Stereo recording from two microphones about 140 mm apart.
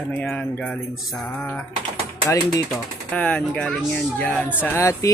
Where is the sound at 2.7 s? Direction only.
10° left (ahead or behind).